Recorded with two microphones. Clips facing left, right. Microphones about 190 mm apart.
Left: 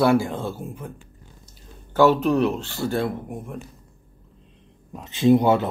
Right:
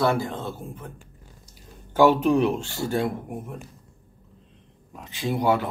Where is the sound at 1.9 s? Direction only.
10° right (ahead or behind).